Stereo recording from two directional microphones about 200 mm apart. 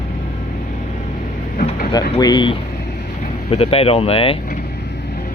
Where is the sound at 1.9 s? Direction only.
20° left (ahead or behind).